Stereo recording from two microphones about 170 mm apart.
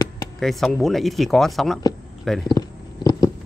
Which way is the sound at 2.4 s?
25° left (ahead or behind).